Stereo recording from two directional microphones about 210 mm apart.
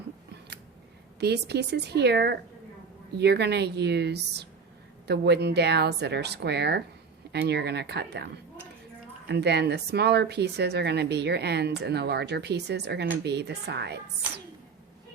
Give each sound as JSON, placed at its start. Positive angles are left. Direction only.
{"t": 1.2, "sound": "a woman's voice", "side_deg": -50}